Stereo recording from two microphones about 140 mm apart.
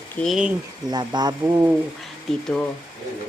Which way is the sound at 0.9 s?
30° right (ahead or behind).